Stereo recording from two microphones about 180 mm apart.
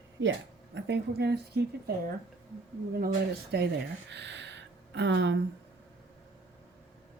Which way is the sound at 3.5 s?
65° right (ahead or behind).